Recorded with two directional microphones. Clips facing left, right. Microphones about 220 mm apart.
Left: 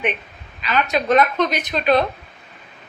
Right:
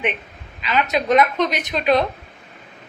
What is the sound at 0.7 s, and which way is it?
A woman's voice, 20° right (ahead or behind).